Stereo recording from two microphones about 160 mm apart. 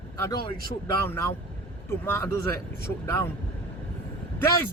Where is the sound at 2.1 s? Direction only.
15° left (ahead or behind).